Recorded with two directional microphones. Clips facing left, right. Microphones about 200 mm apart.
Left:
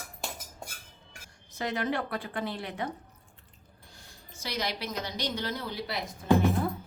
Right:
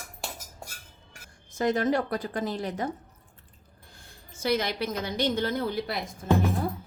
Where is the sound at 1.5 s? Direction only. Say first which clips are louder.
Right 6 dB; 45° right (ahead or behind).